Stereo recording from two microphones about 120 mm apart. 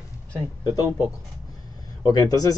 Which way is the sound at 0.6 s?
30° left (ahead or behind).